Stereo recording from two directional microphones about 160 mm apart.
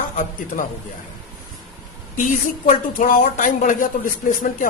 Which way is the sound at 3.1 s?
55° left (ahead or behind).